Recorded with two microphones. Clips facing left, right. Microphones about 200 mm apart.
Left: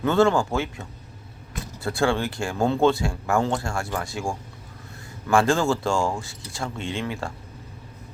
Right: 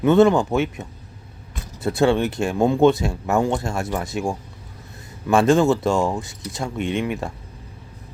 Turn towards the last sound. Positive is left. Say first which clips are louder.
# right 6 dB
turn(degrees=-20)  # may be behind; listen again after turning